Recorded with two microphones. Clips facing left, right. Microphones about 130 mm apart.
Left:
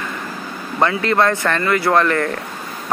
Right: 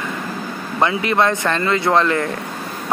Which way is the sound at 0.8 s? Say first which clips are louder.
Left 1 dB; 20° right (ahead or behind).